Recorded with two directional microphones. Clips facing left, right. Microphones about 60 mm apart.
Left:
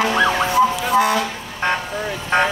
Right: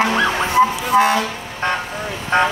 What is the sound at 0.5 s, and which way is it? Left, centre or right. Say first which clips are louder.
Emergency vehicle: right 4 dB; right.